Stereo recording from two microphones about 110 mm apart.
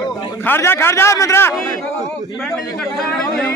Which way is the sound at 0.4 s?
20° left (ahead or behind).